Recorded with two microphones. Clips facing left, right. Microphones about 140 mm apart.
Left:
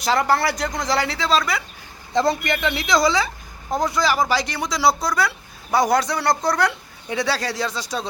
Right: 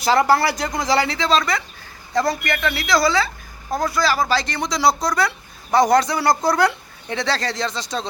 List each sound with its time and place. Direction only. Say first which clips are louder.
0.0 s speech: right 3 dB; centre (ahead or behind)
2.1 s speech: left 1 dB; 20° left (ahead or behind); by 7.2 s centre (ahead or behind)
7.2 s speech: even; 10° left (ahead or behind)